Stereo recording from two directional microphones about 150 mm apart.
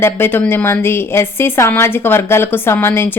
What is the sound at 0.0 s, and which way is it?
Speech, 15° left (ahead or behind).